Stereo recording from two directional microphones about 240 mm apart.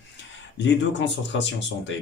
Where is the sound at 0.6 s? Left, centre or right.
Left.